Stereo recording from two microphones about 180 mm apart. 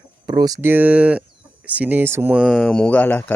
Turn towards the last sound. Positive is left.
turn(degrees=10)  # may be behind; listen again after turning